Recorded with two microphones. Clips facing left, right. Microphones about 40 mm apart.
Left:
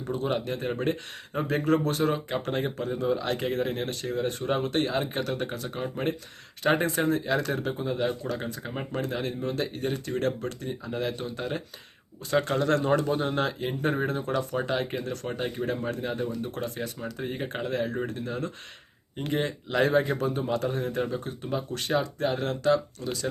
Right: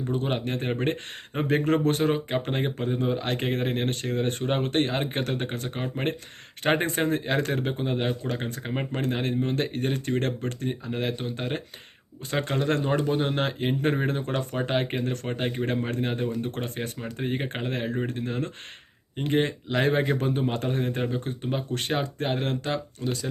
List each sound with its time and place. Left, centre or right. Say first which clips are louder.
0.1 s speech: left 1 dB; right
12.3 s speech: left 2 dB; right